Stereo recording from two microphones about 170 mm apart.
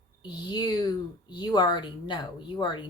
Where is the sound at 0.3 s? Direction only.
25° left (ahead or behind).